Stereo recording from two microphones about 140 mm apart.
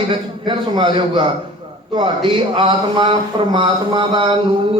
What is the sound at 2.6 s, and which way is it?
Speech, 35° right (ahead or behind).